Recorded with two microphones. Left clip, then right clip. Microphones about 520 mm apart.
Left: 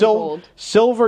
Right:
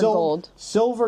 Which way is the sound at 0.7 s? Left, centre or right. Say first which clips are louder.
Left 6 dB; left.